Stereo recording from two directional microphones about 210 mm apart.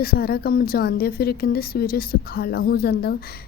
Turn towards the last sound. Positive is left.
turn(degrees=50)  # may be behind; listen again after turning